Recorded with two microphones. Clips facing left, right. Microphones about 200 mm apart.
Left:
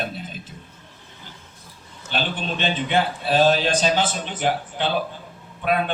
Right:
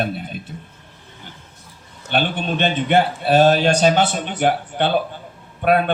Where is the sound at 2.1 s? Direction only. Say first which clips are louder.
Right 5 dB; 55° right (ahead or behind).